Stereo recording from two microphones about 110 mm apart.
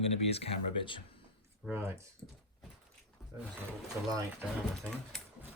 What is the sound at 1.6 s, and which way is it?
Speech, 20° right (ahead or behind).